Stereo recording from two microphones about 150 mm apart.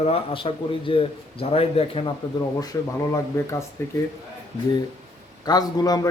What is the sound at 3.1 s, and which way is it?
Speech, 20° left (ahead or behind).